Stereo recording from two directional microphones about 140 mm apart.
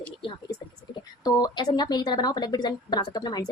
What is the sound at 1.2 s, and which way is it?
A woman's voice, 30° left (ahead or behind).